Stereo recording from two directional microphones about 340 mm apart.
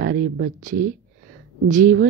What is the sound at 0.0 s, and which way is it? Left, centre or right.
Speech, right.